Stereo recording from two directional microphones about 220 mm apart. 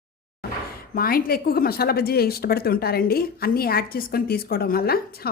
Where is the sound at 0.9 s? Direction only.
40° left (ahead or behind).